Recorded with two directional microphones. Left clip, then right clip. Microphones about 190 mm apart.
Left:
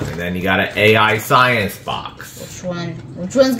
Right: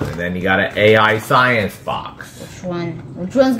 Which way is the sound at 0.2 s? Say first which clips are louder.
Right 1 dB; 35° left (ahead or behind).